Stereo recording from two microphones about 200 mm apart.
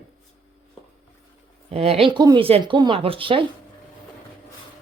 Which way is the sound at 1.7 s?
30° right (ahead or behind).